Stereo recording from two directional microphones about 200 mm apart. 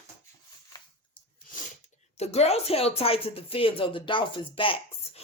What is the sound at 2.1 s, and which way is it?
Speech, 30° left (ahead or behind).